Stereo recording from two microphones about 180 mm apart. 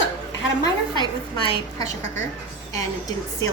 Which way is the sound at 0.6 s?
25° left (ahead or behind).